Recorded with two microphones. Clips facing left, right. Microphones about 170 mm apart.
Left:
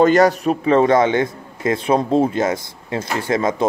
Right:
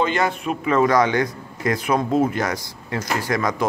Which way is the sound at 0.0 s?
40° left (ahead or behind).